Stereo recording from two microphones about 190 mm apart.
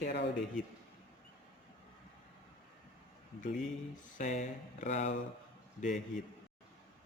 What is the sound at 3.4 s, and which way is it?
A man's voice, 40° left (ahead or behind).